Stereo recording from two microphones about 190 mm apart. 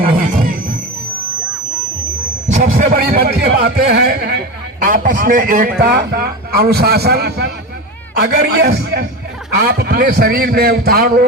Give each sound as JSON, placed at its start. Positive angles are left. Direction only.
{"t": 0.0, "sound": "wild animals", "side_deg": -50}
{"t": 2.5, "sound": "a man's voice", "side_deg": -50}
{"t": 4.8, "sound": "a man's voice", "side_deg": -45}
{"t": 5.8, "sound": "a man's voice", "side_deg": -55}